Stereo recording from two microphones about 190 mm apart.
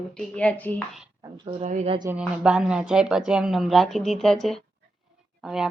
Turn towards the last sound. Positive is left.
turn(degrees=0)  # may be behind; listen again after turning